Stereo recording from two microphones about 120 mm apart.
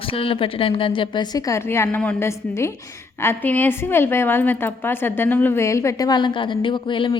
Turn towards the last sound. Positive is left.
turn(degrees=40)  # may be behind; listen again after turning